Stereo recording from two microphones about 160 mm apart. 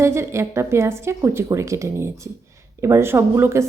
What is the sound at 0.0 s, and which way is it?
A woman's voice, 15° right (ahead or behind).